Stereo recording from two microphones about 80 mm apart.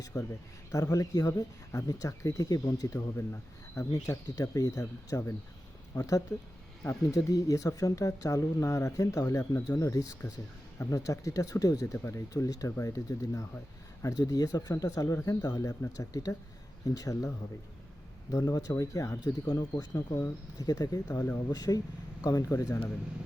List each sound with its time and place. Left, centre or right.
0.0 s a man's voice: left
0.7 s speech: left